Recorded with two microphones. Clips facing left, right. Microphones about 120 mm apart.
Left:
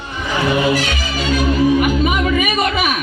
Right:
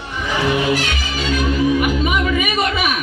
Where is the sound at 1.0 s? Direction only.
45° left (ahead or behind).